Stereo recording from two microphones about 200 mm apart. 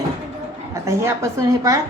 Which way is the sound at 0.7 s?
15° right (ahead or behind).